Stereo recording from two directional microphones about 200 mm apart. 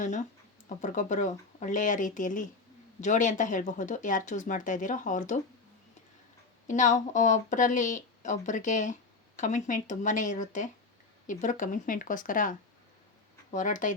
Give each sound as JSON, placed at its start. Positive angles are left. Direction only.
{"t": 0.8, "sound": "speech", "side_deg": 40}
{"t": 6.7, "sound": "speech", "side_deg": 40}